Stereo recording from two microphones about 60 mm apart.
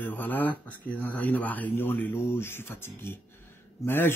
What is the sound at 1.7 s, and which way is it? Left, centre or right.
Speech, left.